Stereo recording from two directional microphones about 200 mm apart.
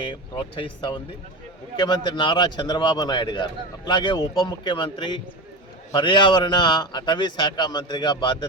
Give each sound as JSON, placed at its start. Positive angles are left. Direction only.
{"t": 0.1, "sound": "a man's voice", "side_deg": 25}